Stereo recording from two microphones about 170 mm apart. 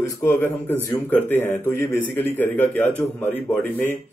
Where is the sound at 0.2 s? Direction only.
10° left (ahead or behind).